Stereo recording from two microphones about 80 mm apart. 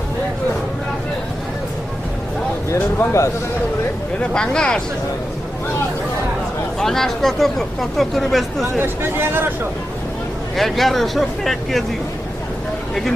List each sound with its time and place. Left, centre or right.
2.7 s speech: left
4.2 s speech: centre
6.7 s speech: centre
8.8 s speech: right
10.5 s speech: centre